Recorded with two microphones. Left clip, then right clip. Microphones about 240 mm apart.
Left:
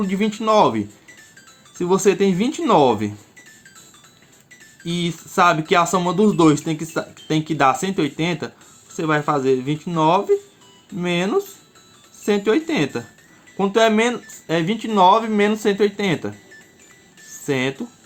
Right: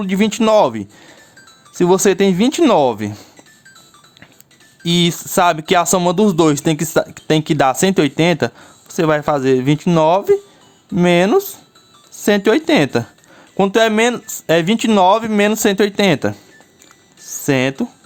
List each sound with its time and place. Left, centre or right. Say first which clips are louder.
0.0 s speech: right 6 dB; right
4.8 s speech: right 9 dB; right
17.2 s music: right 6 dB; right